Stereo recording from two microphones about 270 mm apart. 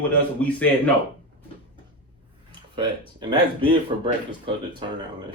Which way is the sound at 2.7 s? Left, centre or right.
Centre.